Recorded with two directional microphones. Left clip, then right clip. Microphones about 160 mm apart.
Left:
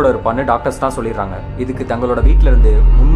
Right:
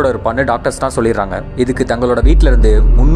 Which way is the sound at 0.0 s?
35° right (ahead or behind).